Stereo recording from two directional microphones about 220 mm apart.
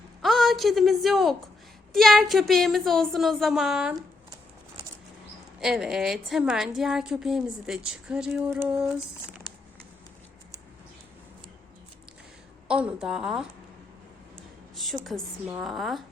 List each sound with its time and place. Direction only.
0.2 s a woman's voice: centre (ahead or behind)
5.5 s a woman's voice: centre (ahead or behind)
12.6 s a woman's voice: 5° right (ahead or behind)
15.1 s a woman's voice: centre (ahead or behind)